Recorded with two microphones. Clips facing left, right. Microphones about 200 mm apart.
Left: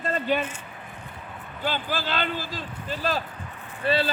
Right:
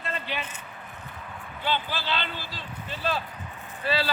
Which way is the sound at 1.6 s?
45° left (ahead or behind).